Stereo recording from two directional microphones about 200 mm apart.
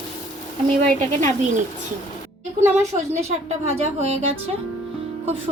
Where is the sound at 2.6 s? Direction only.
35° right (ahead or behind).